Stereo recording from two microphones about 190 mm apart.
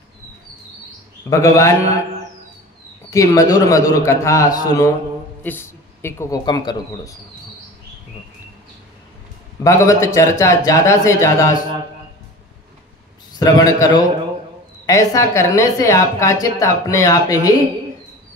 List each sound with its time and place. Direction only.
1.2 s a woman's voice: 15° left (ahead or behind)
3.1 s a woman's voice: 15° left (ahead or behind)
9.6 s a woman's voice: 15° left (ahead or behind)
13.4 s a man's voice: 20° left (ahead or behind)